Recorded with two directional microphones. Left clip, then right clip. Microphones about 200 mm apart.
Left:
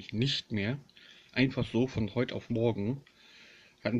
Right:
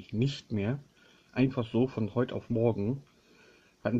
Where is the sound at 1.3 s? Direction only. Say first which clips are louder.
Even; 10° left (ahead or behind).